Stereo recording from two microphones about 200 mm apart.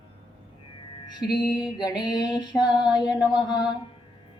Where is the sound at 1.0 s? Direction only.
20° left (ahead or behind).